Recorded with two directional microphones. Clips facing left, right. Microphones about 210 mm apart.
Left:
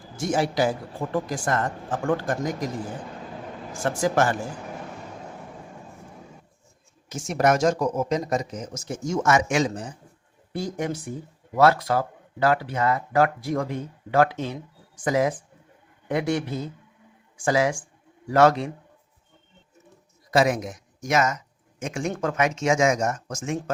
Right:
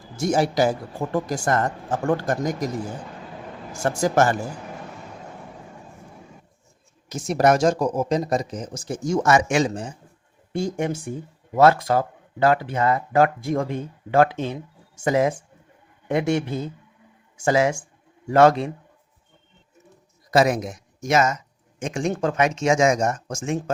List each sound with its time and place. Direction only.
0.2 s speech: 40° right (ahead or behind)
3.8 s a man's voice: 45° right (ahead or behind)
7.1 s speech: 35° right (ahead or behind)
20.3 s speech: 40° right (ahead or behind)
21.0 s speech: 25° right (ahead or behind)